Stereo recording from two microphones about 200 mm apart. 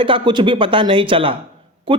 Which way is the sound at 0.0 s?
25° right (ahead or behind).